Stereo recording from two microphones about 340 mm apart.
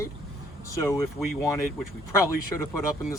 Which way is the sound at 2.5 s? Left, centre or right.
Left.